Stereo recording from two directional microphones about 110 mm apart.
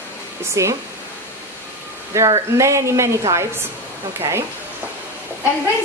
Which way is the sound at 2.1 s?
30° right (ahead or behind).